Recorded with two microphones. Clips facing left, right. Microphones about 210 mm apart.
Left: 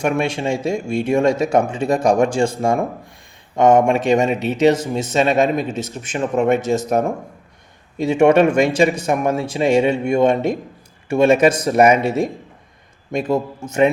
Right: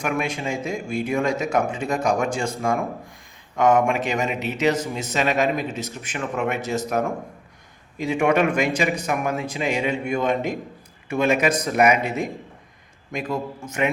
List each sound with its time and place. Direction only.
0.0 s a man's voice: 30° left (ahead or behind)
13.7 s a man's voice: 30° left (ahead or behind)